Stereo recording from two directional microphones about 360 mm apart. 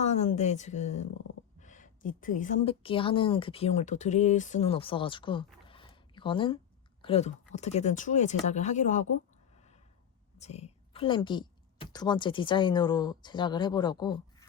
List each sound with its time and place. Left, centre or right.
0.0 s a woman's voice: centre
5.6 s a sound: centre
7.0 s a woman's voice: centre